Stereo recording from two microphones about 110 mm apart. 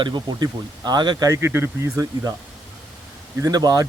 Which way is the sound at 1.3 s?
25° right (ahead or behind).